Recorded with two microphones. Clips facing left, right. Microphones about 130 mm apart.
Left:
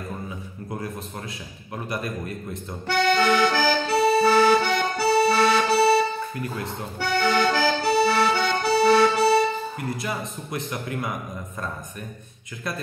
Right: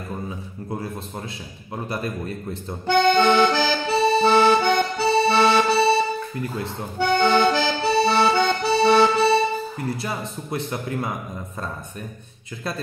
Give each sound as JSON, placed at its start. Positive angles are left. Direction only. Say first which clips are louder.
{"t": 2.9, "sound": "accordion", "louder": "right 4 dB", "side_deg": -25}
{"t": 10.0, "sound": "a man's voice", "louder": "right 1 dB", "side_deg": -30}